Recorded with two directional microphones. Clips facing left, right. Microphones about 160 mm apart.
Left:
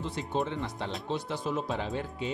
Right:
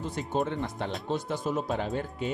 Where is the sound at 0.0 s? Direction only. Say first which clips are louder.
Right 2 dB; 45° right (ahead or behind).